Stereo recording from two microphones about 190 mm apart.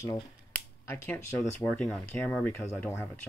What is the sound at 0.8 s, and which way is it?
Speech, 10° left (ahead or behind).